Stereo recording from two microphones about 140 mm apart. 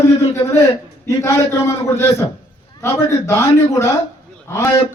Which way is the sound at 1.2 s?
20° left (ahead or behind).